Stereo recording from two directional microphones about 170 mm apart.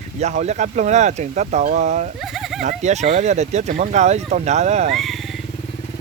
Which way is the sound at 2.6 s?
40° right (ahead or behind).